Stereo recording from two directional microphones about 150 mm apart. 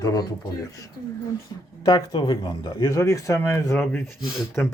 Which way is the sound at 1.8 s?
25° left (ahead or behind).